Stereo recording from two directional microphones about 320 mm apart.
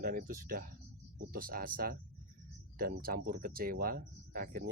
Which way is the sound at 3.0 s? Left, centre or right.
Right.